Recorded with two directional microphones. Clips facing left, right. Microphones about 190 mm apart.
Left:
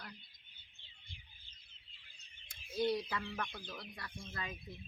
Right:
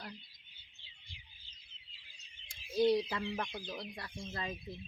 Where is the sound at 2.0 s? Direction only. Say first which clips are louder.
Right 1 dB; 55° left (ahead or behind).